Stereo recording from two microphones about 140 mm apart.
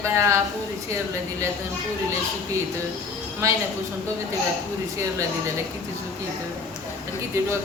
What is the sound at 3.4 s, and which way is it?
Speech, 20° right (ahead or behind).